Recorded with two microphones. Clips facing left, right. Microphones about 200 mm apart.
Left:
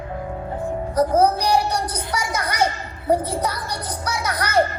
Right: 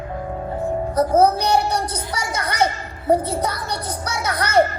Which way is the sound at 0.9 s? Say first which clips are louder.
Right 1 dB; 30° right (ahead or behind).